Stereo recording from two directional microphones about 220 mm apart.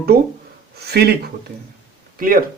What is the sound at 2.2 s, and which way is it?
Speech, 40° right (ahead or behind).